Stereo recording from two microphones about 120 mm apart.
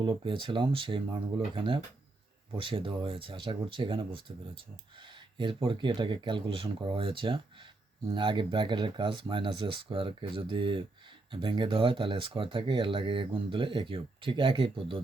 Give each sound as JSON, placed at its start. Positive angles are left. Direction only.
{"t": 0.0, "sound": "speech", "side_deg": -45}